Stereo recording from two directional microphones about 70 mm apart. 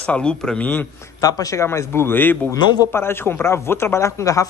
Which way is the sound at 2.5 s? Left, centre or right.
Left.